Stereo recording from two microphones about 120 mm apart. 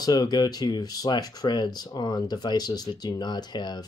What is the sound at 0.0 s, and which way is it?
Speech, 35° left (ahead or behind).